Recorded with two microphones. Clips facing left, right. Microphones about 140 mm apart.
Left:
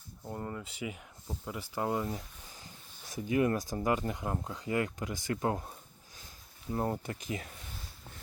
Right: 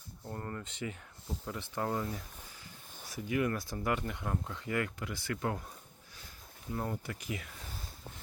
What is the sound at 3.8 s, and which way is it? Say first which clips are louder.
Speech: left 2 dB; 20° left (ahead or behind).